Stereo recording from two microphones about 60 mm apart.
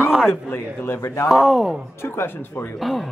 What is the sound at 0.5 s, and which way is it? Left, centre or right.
Speech, left.